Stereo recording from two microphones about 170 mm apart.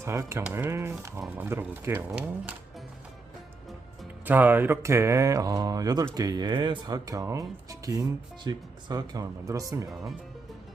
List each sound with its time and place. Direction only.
0.0 s speech: 15° right (ahead or behind)
4.3 s speech: 10° right (ahead or behind)